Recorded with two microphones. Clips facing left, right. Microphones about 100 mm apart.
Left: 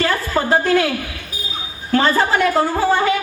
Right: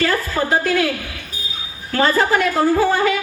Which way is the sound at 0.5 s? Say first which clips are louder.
Left 3 dB; 30° left (ahead or behind).